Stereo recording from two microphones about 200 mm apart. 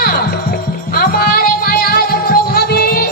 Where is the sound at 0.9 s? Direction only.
50° left (ahead or behind).